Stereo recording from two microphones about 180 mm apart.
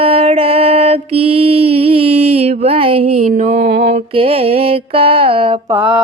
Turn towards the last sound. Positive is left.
turn(degrees=-10)  # may be behind; listen again after turning